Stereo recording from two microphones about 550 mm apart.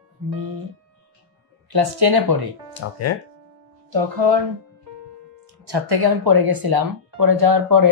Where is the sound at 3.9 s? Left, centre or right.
Right.